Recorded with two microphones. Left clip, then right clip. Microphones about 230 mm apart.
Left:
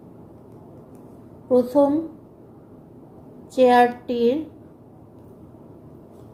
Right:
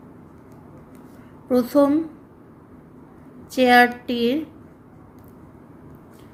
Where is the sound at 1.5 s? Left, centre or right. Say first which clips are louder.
Left 1 dB; right.